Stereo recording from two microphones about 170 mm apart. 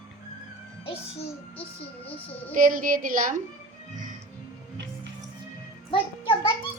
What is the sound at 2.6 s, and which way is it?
Speech, 55° right (ahead or behind).